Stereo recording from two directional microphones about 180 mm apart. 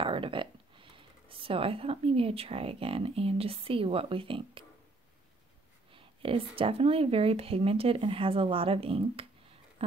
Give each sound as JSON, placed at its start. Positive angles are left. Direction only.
{"t": 0.0, "sound": "speech", "side_deg": -30}
{"t": 6.2, "sound": "speech", "side_deg": -30}